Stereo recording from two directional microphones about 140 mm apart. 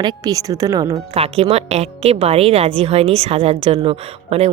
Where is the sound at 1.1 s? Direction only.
45° right (ahead or behind).